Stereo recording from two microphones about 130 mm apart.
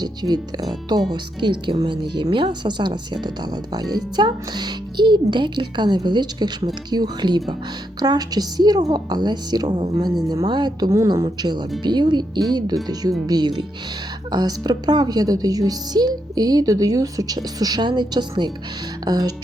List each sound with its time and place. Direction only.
0.0 s speech: 30° right (ahead or behind)